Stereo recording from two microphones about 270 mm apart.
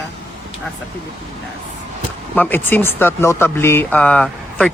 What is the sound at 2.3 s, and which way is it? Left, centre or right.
Speech, centre.